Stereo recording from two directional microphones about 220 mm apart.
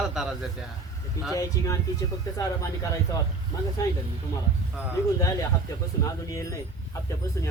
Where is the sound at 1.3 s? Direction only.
15° left (ahead or behind).